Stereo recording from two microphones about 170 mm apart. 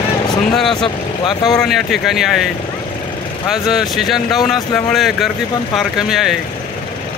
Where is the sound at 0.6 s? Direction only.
Centre (ahead or behind).